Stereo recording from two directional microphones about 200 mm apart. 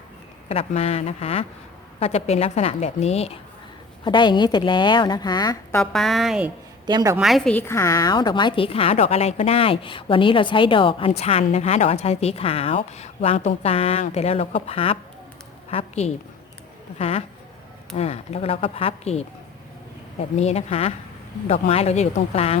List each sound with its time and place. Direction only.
0.4 s a woman's voice: 30° left (ahead or behind)
5.8 s a woman's voice: centre (ahead or behind)
6.8 s a woman's voice: 20° right (ahead or behind)
7.2 s a woman's voice: centre (ahead or behind); by 19.2 s 30° left (ahead or behind)
20.3 s a woman's voice: 30° left (ahead or behind)